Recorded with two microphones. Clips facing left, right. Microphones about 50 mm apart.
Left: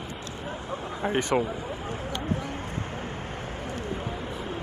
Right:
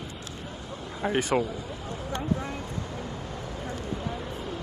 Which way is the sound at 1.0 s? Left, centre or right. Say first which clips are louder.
Even; centre.